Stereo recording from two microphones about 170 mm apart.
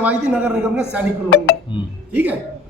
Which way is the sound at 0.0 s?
10° right (ahead or behind).